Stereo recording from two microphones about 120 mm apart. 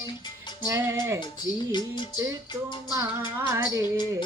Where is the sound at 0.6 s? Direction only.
25° right (ahead or behind).